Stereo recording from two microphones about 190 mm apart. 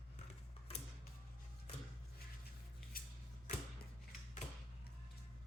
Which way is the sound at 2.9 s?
50° left (ahead or behind).